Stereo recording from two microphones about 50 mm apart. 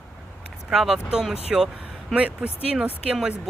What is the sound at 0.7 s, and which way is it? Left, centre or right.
Speech, centre.